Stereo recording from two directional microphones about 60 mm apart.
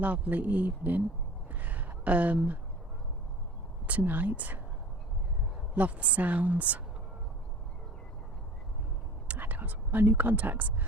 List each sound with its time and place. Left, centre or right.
0.0 s speech: right
1.5 s a sound: right
3.8 s speech: right
5.7 s speech: right
9.2 s speech: right